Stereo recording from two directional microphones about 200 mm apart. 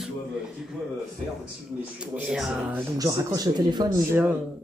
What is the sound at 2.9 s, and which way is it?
Speech, 20° right (ahead or behind).